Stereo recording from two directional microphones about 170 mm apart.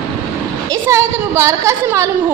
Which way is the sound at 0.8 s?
15° right (ahead or behind).